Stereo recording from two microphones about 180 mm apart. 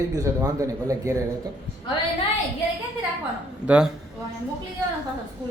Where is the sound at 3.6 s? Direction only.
5° right (ahead or behind).